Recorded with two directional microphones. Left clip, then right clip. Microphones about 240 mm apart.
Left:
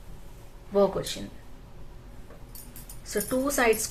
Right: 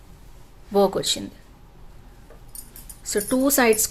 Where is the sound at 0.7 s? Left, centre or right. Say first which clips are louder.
Right 4 dB; right.